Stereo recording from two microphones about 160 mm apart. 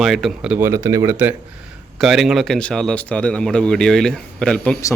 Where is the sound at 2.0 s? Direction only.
Centre (ahead or behind).